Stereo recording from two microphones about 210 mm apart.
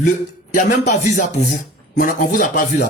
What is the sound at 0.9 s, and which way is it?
Speech, 35° left (ahead or behind).